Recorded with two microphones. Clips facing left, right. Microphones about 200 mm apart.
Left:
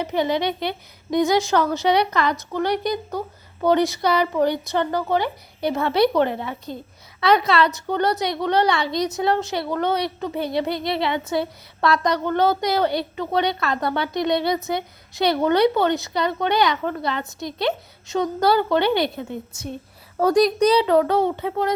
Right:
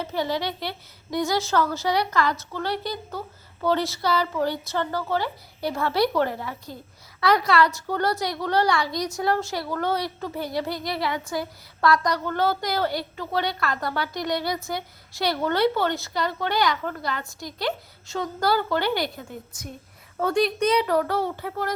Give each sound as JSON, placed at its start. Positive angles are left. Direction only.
{"t": 0.0, "sound": "a woman's voice", "side_deg": 20}
{"t": 20.1, "sound": "a child's voice", "side_deg": 40}
{"t": 20.8, "sound": "a woman's voice", "side_deg": 20}